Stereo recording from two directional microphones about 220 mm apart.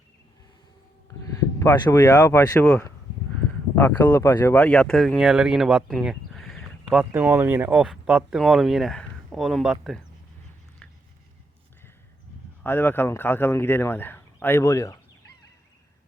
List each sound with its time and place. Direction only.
1.5 s speech: 15° left (ahead or behind)
12.6 s speech: 10° left (ahead or behind)